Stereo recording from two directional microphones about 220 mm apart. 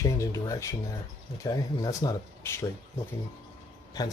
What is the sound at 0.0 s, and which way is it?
Speech, 15° left (ahead or behind).